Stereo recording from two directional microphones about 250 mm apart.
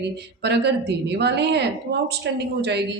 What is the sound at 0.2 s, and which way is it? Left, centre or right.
A woman's voice, right.